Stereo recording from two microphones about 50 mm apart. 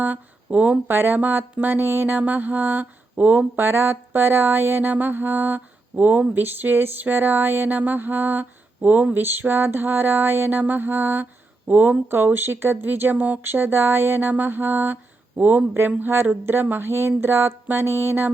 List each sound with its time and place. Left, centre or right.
0.0 s speech: right
0.9 s a sound: right
6.4 s mantra: right
13.4 s mantra: right
15.4 s a sound: right
16.2 s mantra: right